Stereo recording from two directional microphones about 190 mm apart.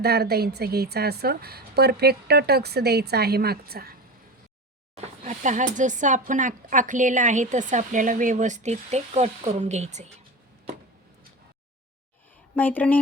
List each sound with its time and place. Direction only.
0.0 s a woman's voice: 55° right (ahead or behind)
4.9 s speech: 40° right (ahead or behind)
12.5 s speech: 10° left (ahead or behind)